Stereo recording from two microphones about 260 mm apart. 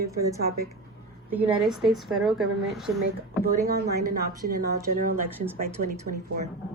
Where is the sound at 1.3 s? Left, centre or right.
Centre.